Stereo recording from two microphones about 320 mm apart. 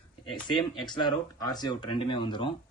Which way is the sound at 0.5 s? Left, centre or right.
Centre.